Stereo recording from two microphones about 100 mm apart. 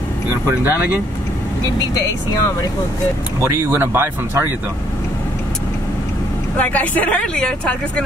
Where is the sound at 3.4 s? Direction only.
25° right (ahead or behind).